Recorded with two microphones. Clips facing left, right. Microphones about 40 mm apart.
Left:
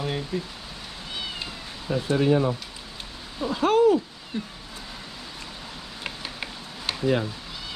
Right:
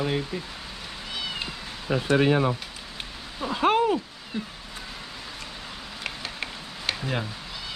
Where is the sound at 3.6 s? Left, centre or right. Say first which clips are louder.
Left 3 dB; right.